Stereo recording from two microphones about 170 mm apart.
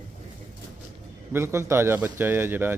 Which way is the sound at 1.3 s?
15° right (ahead or behind).